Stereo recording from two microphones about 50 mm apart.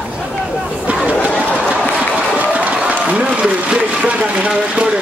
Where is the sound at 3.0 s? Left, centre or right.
Right.